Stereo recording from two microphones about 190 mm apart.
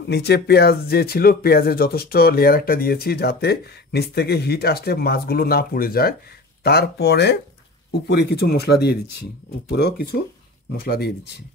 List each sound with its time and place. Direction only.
0.1 s speech: 60° left (ahead or behind)